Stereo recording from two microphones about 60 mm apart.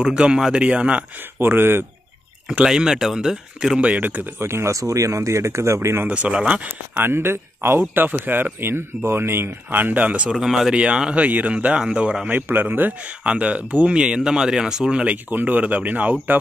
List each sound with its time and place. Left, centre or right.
0.0 s speech: centre
1.4 s speech: right
2.4 s speech: centre
3.8 s speech: right
4.4 s speech: right
6.0 s speech: right
7.0 s speech: right
10.3 s speech: centre
10.8 s speech: centre
12.3 s speech: right
13.2 s speech: right
15.2 s speech: right